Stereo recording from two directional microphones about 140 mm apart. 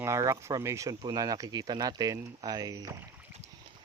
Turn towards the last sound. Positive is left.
turn(degrees=-25)  # may be behind; listen again after turning